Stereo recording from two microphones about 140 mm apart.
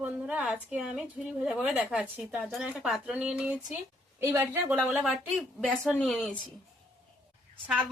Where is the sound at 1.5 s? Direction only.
5° right (ahead or behind).